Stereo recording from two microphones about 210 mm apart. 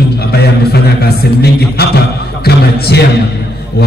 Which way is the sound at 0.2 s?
50° left (ahead or behind).